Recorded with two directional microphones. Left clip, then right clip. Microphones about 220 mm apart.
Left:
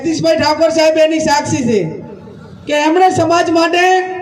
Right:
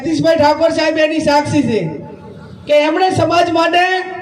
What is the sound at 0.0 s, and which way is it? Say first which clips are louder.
A man's voice: right 1 dB; 35° left (ahead or behind).